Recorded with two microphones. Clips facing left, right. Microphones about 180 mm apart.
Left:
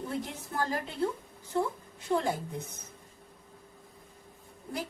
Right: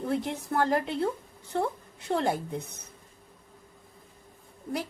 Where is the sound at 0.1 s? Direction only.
65° right (ahead or behind).